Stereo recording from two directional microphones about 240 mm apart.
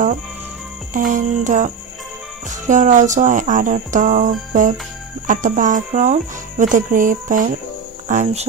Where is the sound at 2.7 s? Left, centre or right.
Right.